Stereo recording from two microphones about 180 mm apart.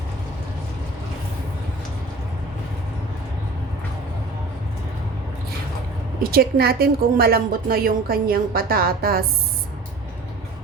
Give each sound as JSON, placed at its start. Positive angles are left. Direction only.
{"t": 6.3, "sound": "a woman's voice", "side_deg": -60}